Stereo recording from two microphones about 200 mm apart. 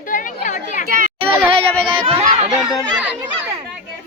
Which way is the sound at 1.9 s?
25° right (ahead or behind).